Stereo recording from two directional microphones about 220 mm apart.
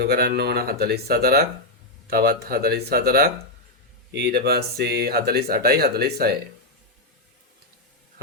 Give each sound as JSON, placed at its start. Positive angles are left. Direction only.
{"t": 0.0, "sound": "speech", "side_deg": -45}